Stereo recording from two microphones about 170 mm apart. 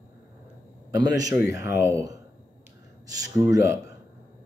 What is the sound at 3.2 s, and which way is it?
Speech, 20° right (ahead or behind).